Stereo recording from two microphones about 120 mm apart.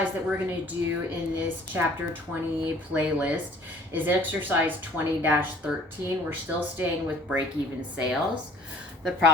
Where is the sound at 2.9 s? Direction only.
15° right (ahead or behind).